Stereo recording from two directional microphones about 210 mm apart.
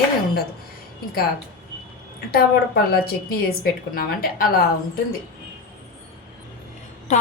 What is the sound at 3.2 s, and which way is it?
A woman's voice, 45° left (ahead or behind).